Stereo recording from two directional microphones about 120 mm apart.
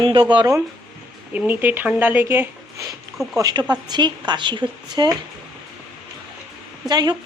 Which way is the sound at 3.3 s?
35° right (ahead or behind).